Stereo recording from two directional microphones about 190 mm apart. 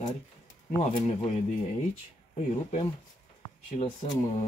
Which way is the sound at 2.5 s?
35° left (ahead or behind).